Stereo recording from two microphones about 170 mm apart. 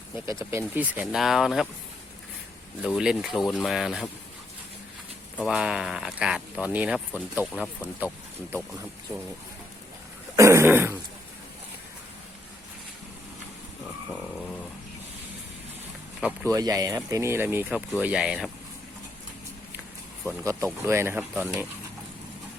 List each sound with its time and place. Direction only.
0.3 s speech: 15° right (ahead or behind)
2.8 s speech: 5° right (ahead or behind)
5.5 s speech: 5° right (ahead or behind)
10.3 s throat clearing: 15° right (ahead or behind)
16.2 s speech: 15° right (ahead or behind)
20.2 s speech: 20° right (ahead or behind)